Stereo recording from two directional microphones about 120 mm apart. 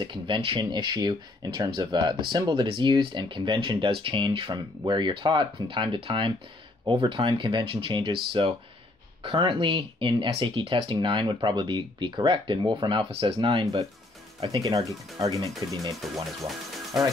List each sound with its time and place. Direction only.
0.0 s speech: 45° right (ahead or behind)
16.0 s speech: centre (ahead or behind)